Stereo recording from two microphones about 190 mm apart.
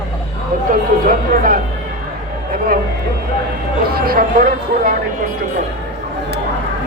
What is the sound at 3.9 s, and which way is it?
Speech, 50° right (ahead or behind).